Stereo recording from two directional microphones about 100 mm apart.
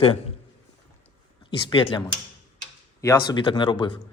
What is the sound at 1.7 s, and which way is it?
Speech, 55° left (ahead or behind).